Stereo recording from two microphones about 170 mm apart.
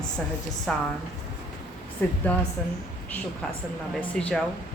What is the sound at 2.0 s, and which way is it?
Speech, 10° left (ahead or behind).